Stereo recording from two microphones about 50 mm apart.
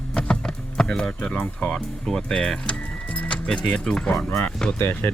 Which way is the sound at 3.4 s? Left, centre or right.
Centre.